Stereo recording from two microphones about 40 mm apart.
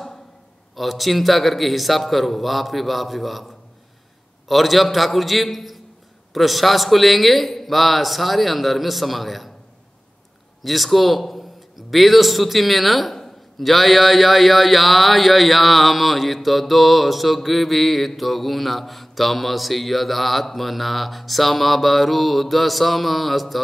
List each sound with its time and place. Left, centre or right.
0.7 s speech: centre
10.6 s speech: centre